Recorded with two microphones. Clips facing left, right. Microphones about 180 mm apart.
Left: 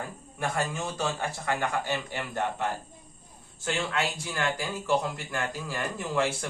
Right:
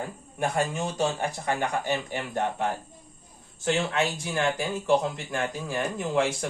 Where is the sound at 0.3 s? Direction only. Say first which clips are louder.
Right 3 dB; 20° right (ahead or behind).